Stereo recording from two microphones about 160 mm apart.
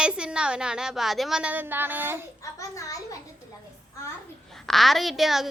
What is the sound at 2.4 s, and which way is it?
Speech, 20° left (ahead or behind).